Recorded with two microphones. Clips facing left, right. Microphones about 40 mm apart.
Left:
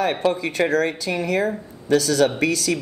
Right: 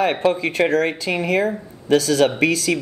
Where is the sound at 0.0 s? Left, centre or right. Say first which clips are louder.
Right 2 dB; centre.